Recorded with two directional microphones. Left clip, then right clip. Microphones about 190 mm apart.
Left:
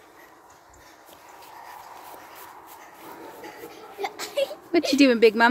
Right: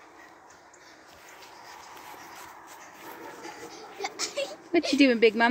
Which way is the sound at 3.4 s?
55° left (ahead or behind).